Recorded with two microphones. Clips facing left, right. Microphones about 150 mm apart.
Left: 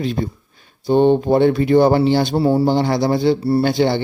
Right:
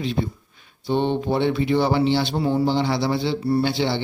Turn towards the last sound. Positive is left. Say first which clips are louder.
# left 6 dB
turn(degrees=50)  # may be behind; listen again after turning